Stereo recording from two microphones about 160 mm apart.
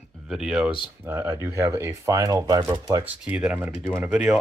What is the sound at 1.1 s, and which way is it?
Speech, 15° right (ahead or behind).